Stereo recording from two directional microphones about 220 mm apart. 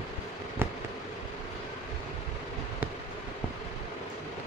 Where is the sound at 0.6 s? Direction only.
10° right (ahead or behind).